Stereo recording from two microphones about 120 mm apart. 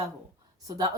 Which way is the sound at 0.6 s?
35° right (ahead or behind).